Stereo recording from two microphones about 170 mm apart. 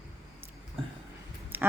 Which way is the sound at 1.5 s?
15° right (ahead or behind).